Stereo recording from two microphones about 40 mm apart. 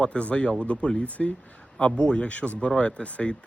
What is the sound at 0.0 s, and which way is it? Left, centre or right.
Speech, left.